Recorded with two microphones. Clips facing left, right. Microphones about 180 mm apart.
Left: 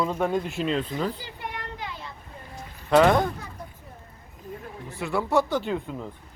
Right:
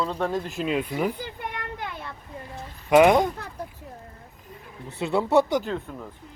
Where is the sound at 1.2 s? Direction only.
55° right (ahead or behind).